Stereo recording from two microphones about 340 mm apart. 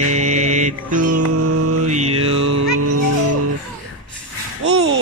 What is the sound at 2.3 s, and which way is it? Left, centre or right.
Music, right.